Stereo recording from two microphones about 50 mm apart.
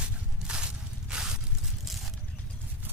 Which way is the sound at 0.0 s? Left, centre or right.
Centre.